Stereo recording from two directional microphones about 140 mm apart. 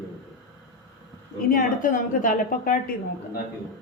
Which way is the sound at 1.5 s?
70° left (ahead or behind).